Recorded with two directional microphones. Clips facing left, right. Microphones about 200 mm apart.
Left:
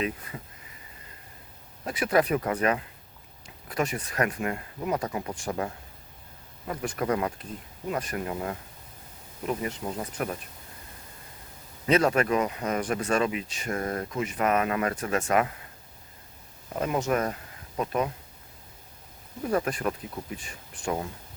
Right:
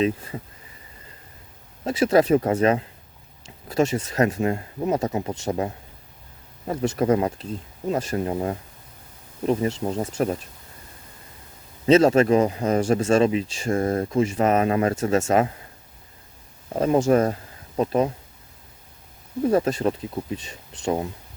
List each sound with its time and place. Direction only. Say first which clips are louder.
1.8 s speech: right 6 dB; 25° right (ahead or behind)
11.9 s speech: right 7 dB; 25° right (ahead or behind)
16.7 s speech: right 8 dB; 30° right (ahead or behind)
19.4 s speech: right 7 dB; 25° right (ahead or behind)